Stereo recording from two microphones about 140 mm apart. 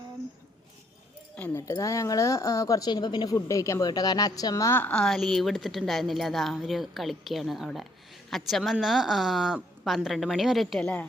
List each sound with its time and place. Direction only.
1.4 s speech: 15° left (ahead or behind)
4.8 s speech: 10° left (ahead or behind)